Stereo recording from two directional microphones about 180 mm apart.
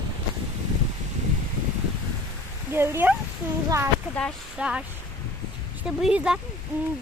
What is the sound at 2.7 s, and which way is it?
Speech, 15° right (ahead or behind).